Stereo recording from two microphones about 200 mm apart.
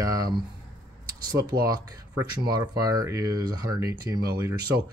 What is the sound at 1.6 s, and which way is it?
Speech, 20° right (ahead or behind).